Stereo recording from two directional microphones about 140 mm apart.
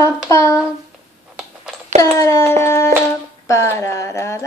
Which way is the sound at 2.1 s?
20° left (ahead or behind).